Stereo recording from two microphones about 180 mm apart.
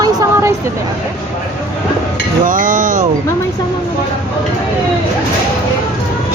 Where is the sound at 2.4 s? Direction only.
50° right (ahead or behind).